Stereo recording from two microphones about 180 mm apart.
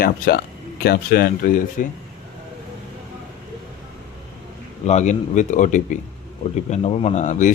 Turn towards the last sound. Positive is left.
turn(degrees=40)  # may be behind; listen again after turning